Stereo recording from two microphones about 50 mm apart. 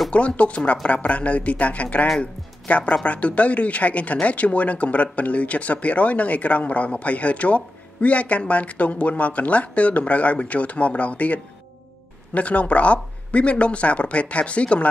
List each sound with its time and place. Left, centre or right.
0.1 s speech: left